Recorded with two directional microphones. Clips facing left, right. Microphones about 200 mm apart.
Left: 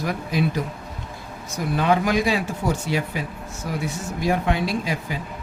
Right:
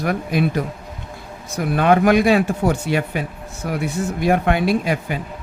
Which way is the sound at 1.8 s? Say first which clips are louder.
Right 6 dB; 60° right (ahead or behind).